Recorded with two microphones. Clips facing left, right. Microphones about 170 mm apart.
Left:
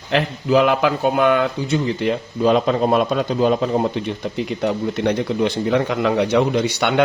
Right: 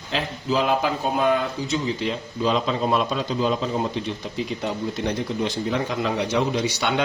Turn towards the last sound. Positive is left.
turn(degrees=60)  # may be behind; listen again after turning